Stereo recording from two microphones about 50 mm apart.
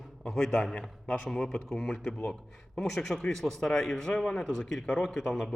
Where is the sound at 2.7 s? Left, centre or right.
Centre.